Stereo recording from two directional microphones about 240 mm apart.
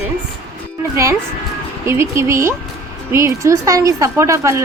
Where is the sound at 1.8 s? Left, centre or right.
Centre.